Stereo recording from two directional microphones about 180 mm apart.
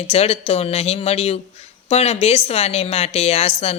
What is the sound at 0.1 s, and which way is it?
A woman's voice, 35° left (ahead or behind).